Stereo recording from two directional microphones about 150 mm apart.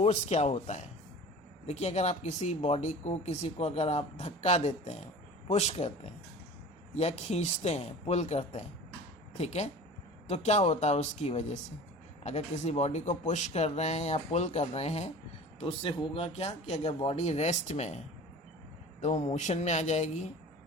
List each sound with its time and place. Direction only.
0.0 s speech: 45° left (ahead or behind)
6.9 s speech: 45° left (ahead or behind)
19.0 s speech: 50° left (ahead or behind)